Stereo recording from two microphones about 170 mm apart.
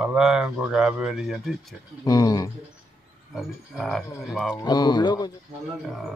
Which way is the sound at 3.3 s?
Centre (ahead or behind).